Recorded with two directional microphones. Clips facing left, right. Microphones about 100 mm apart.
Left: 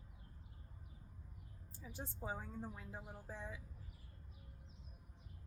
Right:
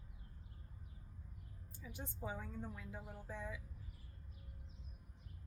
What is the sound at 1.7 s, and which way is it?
A woman's voice, 30° left (ahead or behind).